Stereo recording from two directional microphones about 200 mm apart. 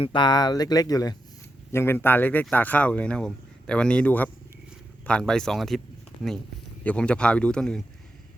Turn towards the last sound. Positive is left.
turn(degrees=5)  # may be behind; listen again after turning